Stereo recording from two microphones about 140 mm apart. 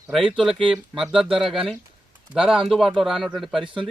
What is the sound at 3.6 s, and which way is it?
Speech, 35° right (ahead or behind).